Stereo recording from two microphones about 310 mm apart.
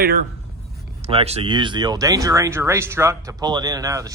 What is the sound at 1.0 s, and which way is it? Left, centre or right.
Speech, centre.